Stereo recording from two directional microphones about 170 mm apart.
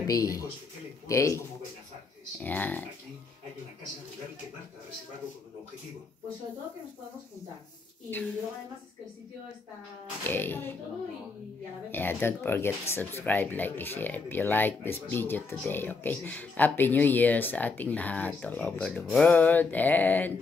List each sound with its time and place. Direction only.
0.0 s speech: 20° left (ahead or behind)
2.4 s speech: 10° left (ahead or behind)
10.2 s speech: 10° left (ahead or behind)
11.9 s speech: 10° left (ahead or behind)